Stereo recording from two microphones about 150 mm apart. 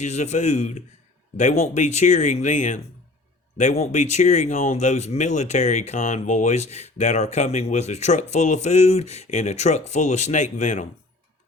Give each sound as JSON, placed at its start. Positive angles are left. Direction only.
{"t": 0.0, "sound": "speech", "side_deg": 50}
{"t": 3.9, "sound": "speech", "side_deg": 50}